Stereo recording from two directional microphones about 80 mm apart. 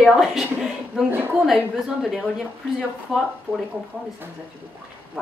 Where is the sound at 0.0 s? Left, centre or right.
Centre.